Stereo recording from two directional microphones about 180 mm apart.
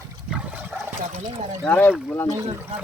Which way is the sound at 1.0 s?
35° right (ahead or behind).